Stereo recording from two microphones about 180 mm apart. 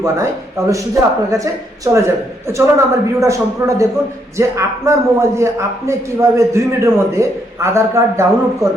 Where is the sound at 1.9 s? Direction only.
15° right (ahead or behind).